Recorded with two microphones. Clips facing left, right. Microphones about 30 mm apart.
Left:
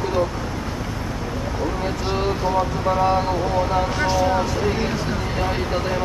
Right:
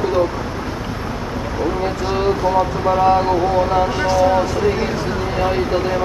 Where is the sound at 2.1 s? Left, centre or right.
Centre.